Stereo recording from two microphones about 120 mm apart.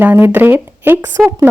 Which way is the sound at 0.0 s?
15° right (ahead or behind).